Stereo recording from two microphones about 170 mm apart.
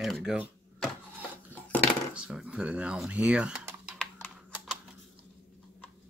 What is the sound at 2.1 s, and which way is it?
Speech, 5° right (ahead or behind).